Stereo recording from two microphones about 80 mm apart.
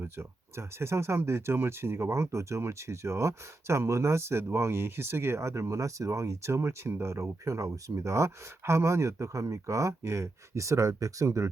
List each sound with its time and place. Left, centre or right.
0.0 s speech: right